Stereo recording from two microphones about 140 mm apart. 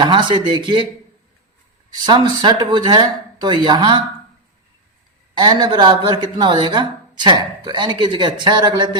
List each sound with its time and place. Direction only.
0.0 s a woman's voice: 35° right (ahead or behind)
2.0 s a woman's voice: 35° right (ahead or behind)
5.4 s a woman's voice: 30° right (ahead or behind)